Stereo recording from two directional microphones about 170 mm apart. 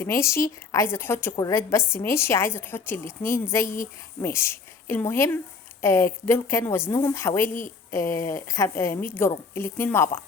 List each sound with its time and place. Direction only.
0.0 s a woman's voice: 15° left (ahead or behind)